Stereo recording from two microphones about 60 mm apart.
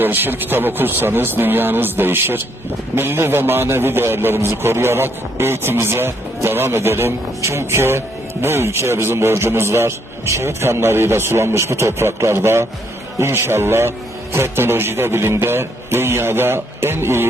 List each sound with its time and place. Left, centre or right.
0.0 s a man's voice: right